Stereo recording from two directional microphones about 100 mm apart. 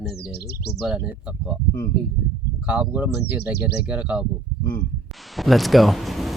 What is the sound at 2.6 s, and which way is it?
Speech, 15° right (ahead or behind).